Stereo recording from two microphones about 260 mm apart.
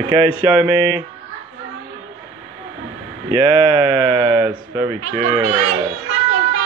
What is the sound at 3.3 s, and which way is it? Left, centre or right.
Speech, right.